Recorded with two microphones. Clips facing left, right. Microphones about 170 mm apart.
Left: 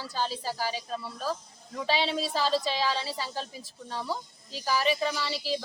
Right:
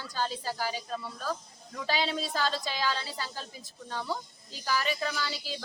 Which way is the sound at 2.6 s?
30° left (ahead or behind).